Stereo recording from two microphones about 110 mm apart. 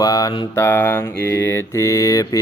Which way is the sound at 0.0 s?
30° left (ahead or behind).